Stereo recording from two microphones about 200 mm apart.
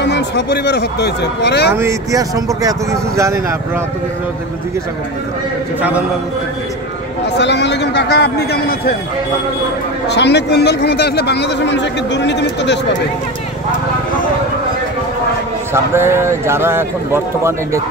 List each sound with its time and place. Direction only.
0.0 s a man's voice: 60° left (ahead or behind)
1.8 s a man's voice: 15° right (ahead or behind)
5.8 s a man's voice: 10° right (ahead or behind)
7.3 s a man's voice: 60° left (ahead or behind)
10.0 s a man's voice: 60° left (ahead or behind)
15.7 s a man's voice: 10° right (ahead or behind)